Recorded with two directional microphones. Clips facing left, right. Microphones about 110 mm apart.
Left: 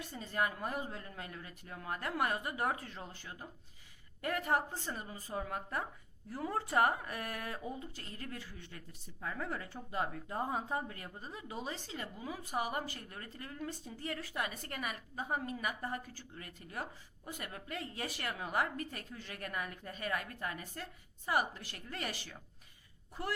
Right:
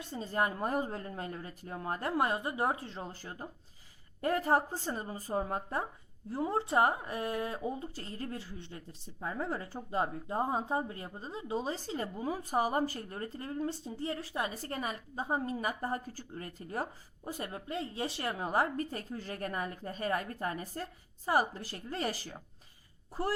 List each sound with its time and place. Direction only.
0.0 s speech: 30° right (ahead or behind)